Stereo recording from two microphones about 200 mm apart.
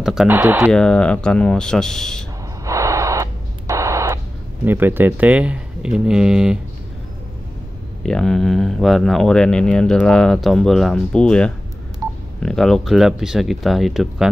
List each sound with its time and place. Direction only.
0.0 s speech: centre (ahead or behind)
0.7 s speech: 5° left (ahead or behind)
2.6 s radio: 15° right (ahead or behind)
4.6 s speech: 10° right (ahead or behind)
8.0 s speech: 5° left (ahead or behind)